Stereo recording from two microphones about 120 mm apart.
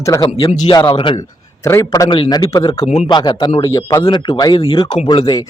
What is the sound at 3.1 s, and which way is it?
A man's voice, 40° left (ahead or behind).